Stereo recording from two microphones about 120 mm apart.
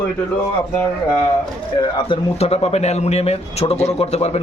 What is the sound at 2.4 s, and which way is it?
A man's voice, 60° left (ahead or behind).